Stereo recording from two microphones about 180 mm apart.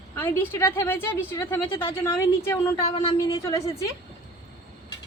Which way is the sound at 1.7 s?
30° left (ahead or behind).